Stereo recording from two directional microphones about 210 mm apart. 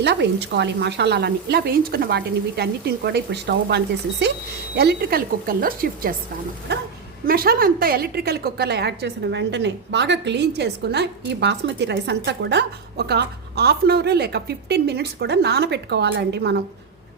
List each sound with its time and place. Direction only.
0.0 s a woman's voice: 55° right (ahead or behind)